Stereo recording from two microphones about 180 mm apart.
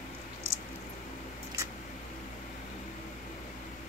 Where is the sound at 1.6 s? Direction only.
15° right (ahead or behind).